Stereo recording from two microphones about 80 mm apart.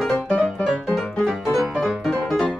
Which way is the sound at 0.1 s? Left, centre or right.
Centre.